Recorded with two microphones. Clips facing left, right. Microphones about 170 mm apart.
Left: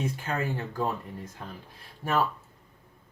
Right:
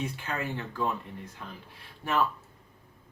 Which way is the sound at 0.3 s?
40° left (ahead or behind).